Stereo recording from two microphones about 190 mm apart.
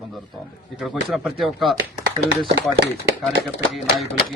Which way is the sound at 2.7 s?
60° right (ahead or behind).